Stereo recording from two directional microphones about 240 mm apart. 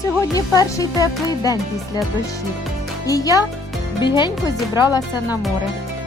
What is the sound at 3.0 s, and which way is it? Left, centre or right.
Speech, centre.